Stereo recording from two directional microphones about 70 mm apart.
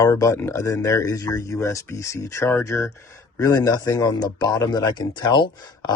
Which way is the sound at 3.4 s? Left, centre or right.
Left.